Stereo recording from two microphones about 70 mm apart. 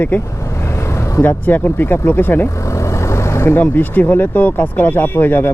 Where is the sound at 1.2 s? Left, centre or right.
Left.